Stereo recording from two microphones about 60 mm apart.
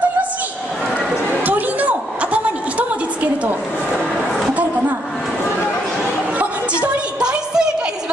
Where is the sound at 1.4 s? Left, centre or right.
Right.